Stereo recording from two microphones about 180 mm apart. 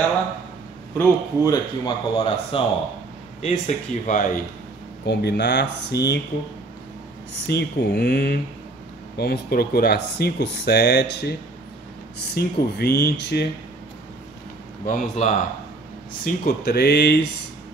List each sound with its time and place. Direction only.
0.9 s speech: 20° left (ahead or behind)
3.4 s speech: 45° left (ahead or behind)
5.0 s speech: 70° left (ahead or behind)
7.4 s speech: 65° left (ahead or behind)
12.4 s speech: 60° left (ahead or behind)
14.9 s speech: 45° left (ahead or behind)
16.3 s speech: 60° left (ahead or behind)